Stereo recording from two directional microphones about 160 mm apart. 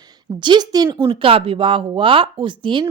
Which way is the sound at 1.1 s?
35° right (ahead or behind).